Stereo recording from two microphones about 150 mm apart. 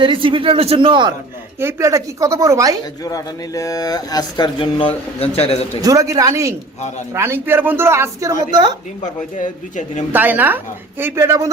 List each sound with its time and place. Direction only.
0.0 s speech: 35° right (ahead or behind)
1.5 s speech: 20° right (ahead or behind)
3.0 s speech: 25° left (ahead or behind); by 5.8 s 40° left (ahead or behind)
5.8 s speech: 20° right (ahead or behind)
9.0 s a man's voice: 55° left (ahead or behind)
10.1 s speech: 10° right (ahead or behind)